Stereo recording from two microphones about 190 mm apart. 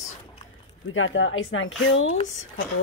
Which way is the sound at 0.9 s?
90° left.